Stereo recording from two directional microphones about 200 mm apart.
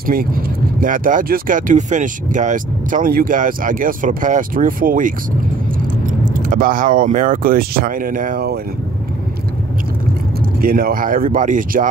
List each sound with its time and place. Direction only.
0.0 s speech: 45° right (ahead or behind)
10.6 s speech: 45° right (ahead or behind)